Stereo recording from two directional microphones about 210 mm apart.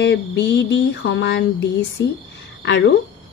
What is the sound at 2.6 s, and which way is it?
Speech, 55° left (ahead or behind).